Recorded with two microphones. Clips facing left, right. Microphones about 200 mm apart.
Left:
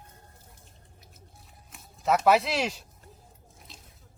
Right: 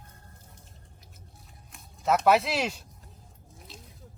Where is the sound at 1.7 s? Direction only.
Centre (ahead or behind).